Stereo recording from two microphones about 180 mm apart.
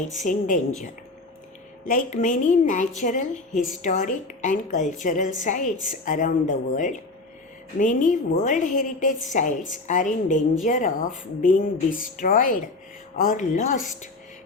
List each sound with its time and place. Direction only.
0.2 s a woman's voice: 45° left (ahead or behind)
1.8 s a woman's voice: 40° left (ahead or behind)